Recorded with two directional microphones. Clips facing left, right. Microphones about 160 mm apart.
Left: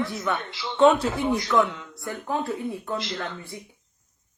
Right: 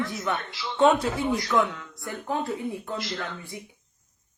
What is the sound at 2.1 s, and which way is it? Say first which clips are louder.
Speech: left 1 dB; 20° right (ahead or behind).